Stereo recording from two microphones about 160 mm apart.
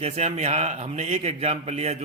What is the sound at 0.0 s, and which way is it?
A man's voice, 40° right (ahead or behind).